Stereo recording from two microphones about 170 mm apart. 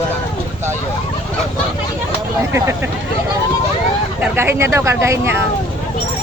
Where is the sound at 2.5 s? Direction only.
15° right (ahead or behind).